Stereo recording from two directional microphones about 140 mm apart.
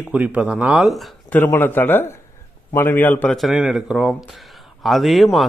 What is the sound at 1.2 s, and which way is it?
Speech, 15° left (ahead or behind).